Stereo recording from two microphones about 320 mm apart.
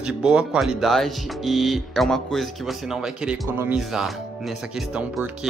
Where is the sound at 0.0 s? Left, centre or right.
Centre.